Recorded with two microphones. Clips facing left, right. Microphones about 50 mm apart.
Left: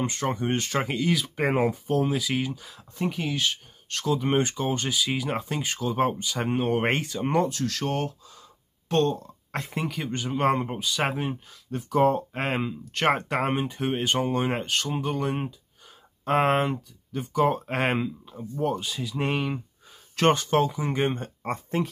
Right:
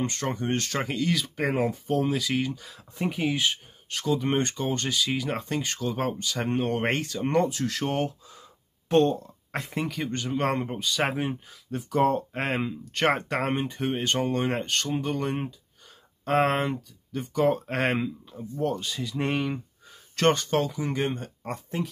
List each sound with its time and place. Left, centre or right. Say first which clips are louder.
0.0 s speech: left 2 dB; centre
1.3 s speech: left 2 dB; left
1.7 s speech: left 1 dB; centre
3.0 s speech: right 1 dB; centre
3.9 s speech: left 1 dB; centre
7.4 s speech: even; centre
9.5 s speech: even; centre
20.8 s speech: left 2 dB; left